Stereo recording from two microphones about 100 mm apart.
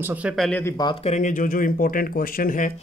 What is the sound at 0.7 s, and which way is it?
Speech, 45° left (ahead or behind).